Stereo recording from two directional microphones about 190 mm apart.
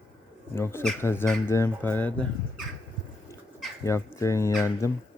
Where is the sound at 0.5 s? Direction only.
15° left (ahead or behind).